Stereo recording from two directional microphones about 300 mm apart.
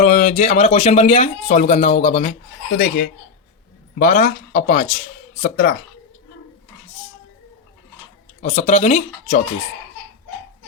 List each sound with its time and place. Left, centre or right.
0.0 s speech: left
8.4 s speech: left